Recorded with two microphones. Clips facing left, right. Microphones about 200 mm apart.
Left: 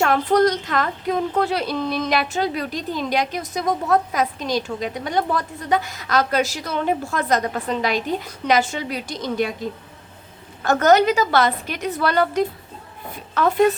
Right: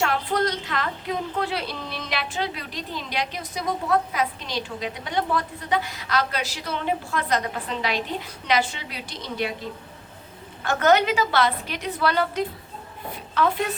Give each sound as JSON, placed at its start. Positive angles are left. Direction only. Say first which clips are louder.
{"t": 0.0, "sound": "a woman's voice", "louder": "left 7 dB", "side_deg": 45}
{"t": 10.6, "sound": "a woman's voice", "louder": "left 4 dB", "side_deg": 40}